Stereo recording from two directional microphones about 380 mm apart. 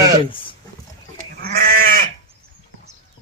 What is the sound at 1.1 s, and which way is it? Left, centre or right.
Goat, right.